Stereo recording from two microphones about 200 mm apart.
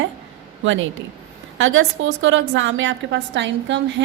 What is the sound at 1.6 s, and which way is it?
A woman's voice, 75° right (ahead or behind).